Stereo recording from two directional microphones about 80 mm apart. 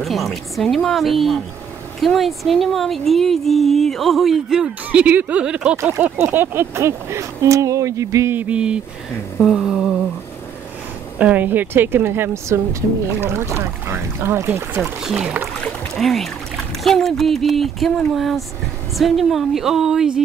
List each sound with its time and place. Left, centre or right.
0.0 s speech: centre
6.1 s speech: right
8.3 s humming: centre
11.1 s speech: centre
14.8 s humming: centre
15.6 s speech: centre